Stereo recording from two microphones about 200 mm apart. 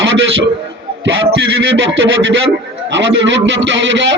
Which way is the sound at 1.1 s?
70° right (ahead or behind).